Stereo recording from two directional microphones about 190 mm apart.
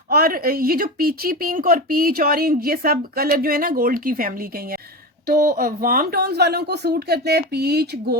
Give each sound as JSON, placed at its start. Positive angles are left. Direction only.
{"t": 0.1, "sound": "speech", "side_deg": -50}